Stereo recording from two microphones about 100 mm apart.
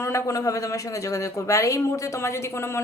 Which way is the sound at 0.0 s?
30° left (ahead or behind).